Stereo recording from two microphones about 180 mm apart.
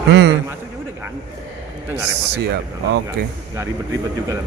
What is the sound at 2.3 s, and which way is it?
Speech, 65° right (ahead or behind).